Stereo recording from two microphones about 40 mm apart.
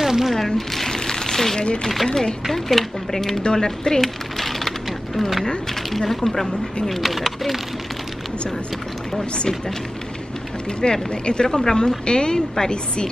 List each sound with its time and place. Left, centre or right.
0.0 s a sound: centre
0.6 s a sound: centre
1.6 s speech: left
2.4 s speech: centre
4.4 s coin: centre
5.9 s speech: centre
10.8 s speech: left